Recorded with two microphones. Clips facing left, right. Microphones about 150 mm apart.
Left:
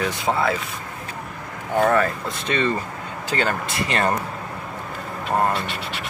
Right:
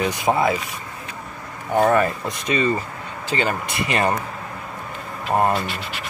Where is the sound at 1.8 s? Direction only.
20° right (ahead or behind).